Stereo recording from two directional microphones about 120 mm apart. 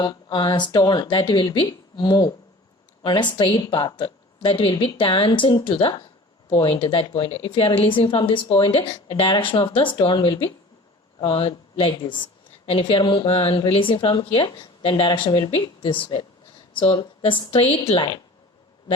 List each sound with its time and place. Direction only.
0.0 s a woman's voice: 35° left (ahead or behind)